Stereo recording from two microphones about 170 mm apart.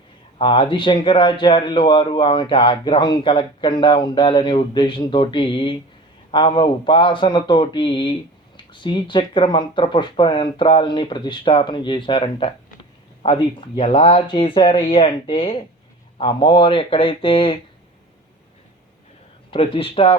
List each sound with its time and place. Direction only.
0.3 s speech: 30° left (ahead or behind)
19.5 s speech: 30° left (ahead or behind)